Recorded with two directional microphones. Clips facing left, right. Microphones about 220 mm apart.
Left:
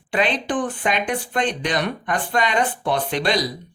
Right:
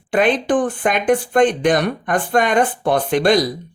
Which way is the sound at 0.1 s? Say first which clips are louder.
Right 6 dB; 50° right (ahead or behind).